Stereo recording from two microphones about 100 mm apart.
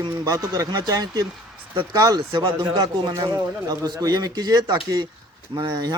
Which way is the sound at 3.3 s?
40° right (ahead or behind).